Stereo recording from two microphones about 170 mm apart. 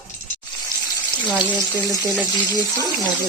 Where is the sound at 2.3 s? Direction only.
25° left (ahead or behind).